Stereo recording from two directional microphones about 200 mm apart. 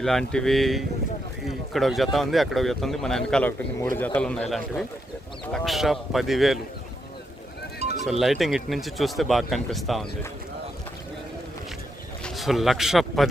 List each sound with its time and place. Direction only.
0.0 s speech: centre (ahead or behind)
7.8 s music: 35° right (ahead or behind)
8.2 s speech: centre (ahead or behind)
12.2 s speech: centre (ahead or behind)